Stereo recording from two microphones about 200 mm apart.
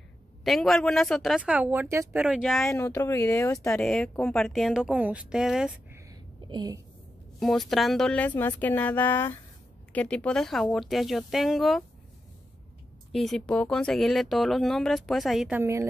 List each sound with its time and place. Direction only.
0.4 s speech: centre (ahead or behind)
2.7 s speech: 15° left (ahead or behind); by 5.9 s 5° right (ahead or behind)
6.0 s a sound: 20° right (ahead or behind)
7.3 s a woman's voice: centre (ahead or behind)
13.1 s speech: centre (ahead or behind)